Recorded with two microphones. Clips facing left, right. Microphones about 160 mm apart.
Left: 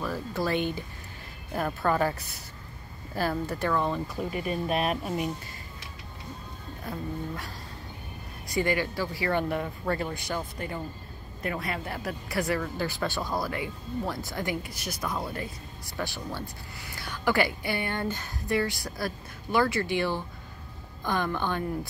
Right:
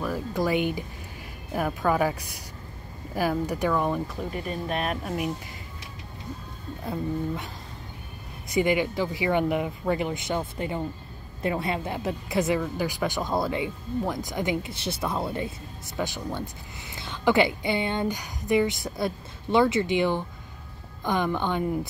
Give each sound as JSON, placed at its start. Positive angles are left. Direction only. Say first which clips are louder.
{"t": 0.0, "sound": "speech", "louder": "right 3 dB", "side_deg": -15}
{"t": 4.1, "sound": "speech", "louder": "left 1 dB", "side_deg": 10}
{"t": 6.9, "sound": "speech", "louder": "right 6 dB", "side_deg": -20}